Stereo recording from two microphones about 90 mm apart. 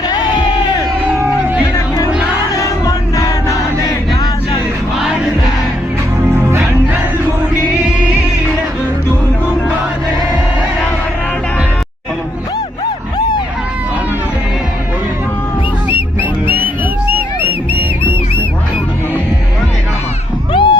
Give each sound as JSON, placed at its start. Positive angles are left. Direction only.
{"t": 0.1, "sound": "crowd", "side_deg": 50}
{"t": 2.6, "sound": "music", "side_deg": 40}
{"t": 20.5, "sound": "dog", "side_deg": 65}